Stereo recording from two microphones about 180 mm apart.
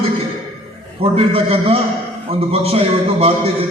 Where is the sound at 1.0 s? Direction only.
30° right (ahead or behind).